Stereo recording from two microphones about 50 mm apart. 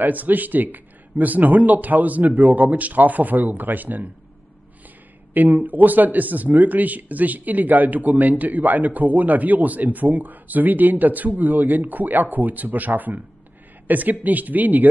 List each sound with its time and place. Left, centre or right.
0.0 s speech: right
5.3 s speech: right